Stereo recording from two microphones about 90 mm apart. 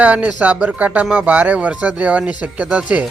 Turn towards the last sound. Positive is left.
turn(degrees=-15)  # may be behind; listen again after turning